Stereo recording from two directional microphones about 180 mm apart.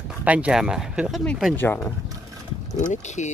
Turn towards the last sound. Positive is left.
turn(degrees=40)  # may be behind; listen again after turning